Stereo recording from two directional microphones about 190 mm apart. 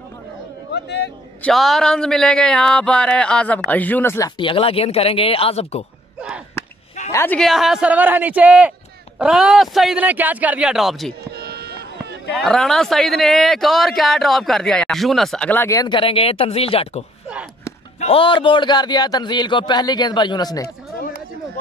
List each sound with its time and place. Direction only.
0.7 s speech: 60° left (ahead or behind)
1.4 s a man's voice: centre (ahead or behind)
4.4 s speech: 30° left (ahead or behind)
6.1 s a sound: 5° right (ahead or behind)
7.1 s a man's voice: 10° left (ahead or behind)
11.3 s a sound: 55° right (ahead or behind)
12.3 s a man's voice: centre (ahead or behind); by 20.6 s 20° left (ahead or behind)